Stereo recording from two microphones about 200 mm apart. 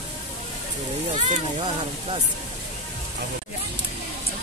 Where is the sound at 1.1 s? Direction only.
30° right (ahead or behind).